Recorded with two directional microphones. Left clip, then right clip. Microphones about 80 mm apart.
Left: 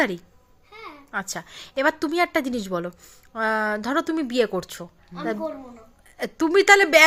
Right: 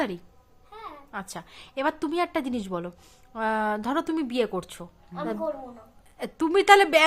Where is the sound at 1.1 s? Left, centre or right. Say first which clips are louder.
Left 9 dB; left.